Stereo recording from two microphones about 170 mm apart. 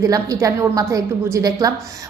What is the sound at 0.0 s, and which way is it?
A woman's voice, 20° right (ahead or behind).